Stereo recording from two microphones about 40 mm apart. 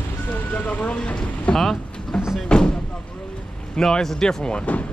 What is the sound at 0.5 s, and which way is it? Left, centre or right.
Speech, left.